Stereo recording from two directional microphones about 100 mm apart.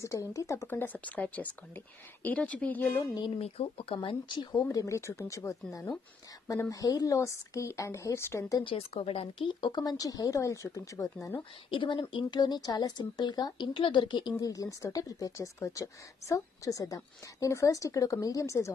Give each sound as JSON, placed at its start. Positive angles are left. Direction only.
{"t": 0.0, "sound": "speech", "side_deg": 35}
{"t": 3.3, "sound": "speech", "side_deg": 85}
{"t": 4.6, "sound": "speech", "side_deg": 35}
{"t": 8.6, "sound": "speech", "side_deg": 75}
{"t": 11.7, "sound": "speech", "side_deg": 50}
{"t": 13.7, "sound": "speech", "side_deg": 55}
{"t": 14.4, "sound": "speech", "side_deg": 35}